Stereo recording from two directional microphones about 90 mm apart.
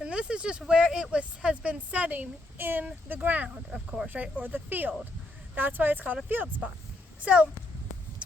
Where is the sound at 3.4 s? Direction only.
10° right (ahead or behind).